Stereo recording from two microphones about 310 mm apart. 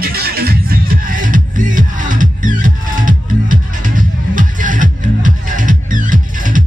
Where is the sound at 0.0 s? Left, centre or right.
Right.